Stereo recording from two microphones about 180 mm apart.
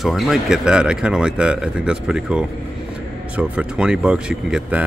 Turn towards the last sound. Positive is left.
turn(degrees=-5)  # may be behind; listen again after turning